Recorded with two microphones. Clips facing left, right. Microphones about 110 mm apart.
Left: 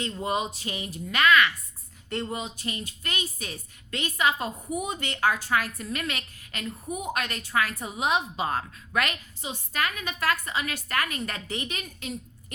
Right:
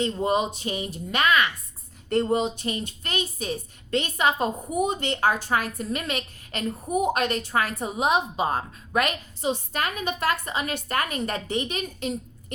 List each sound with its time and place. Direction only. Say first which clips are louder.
0.0 s a woman's voice: right 5 dB; 25° right (ahead or behind)
2.0 s a woman's voice: right 9 dB; 35° right (ahead or behind)
6.6 s a woman's voice: right 8 dB; 35° right (ahead or behind)
9.4 s a woman's voice: right 4 dB; 30° right (ahead or behind)